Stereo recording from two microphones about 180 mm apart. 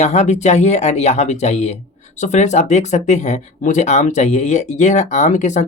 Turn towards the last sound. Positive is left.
turn(degrees=40)  # may be behind; listen again after turning